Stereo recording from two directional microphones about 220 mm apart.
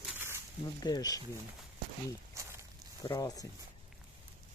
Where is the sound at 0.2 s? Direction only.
10° right (ahead or behind).